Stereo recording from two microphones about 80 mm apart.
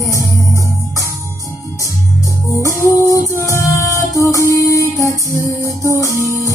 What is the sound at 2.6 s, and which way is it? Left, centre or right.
Music, left.